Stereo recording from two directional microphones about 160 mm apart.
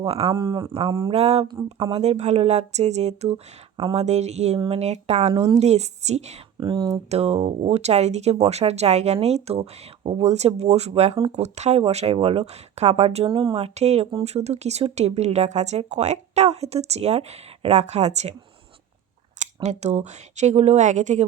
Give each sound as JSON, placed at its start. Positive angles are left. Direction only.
{"t": 0.0, "sound": "speech", "side_deg": -35}
{"t": 0.3, "sound": "speech", "side_deg": -20}
{"t": 0.7, "sound": "speech", "side_deg": -35}
{"t": 5.3, "sound": "speech", "side_deg": -25}
{"t": 5.5, "sound": "speech", "side_deg": -45}
{"t": 6.6, "sound": "speech", "side_deg": -25}
{"t": 7.1, "sound": "speech", "side_deg": -40}
{"t": 19.6, "sound": "speech", "side_deg": -45}